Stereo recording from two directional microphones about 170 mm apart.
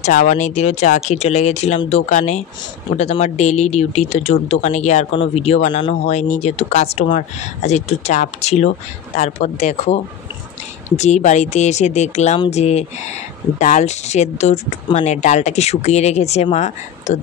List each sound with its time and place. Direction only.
0.0 s speech: 45° left (ahead or behind)